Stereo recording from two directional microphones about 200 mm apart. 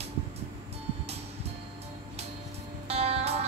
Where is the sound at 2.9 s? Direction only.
30° right (ahead or behind).